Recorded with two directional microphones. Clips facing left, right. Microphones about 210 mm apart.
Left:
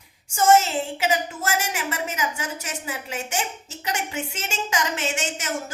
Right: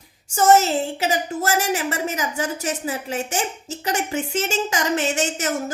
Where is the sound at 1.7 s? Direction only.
35° right (ahead or behind).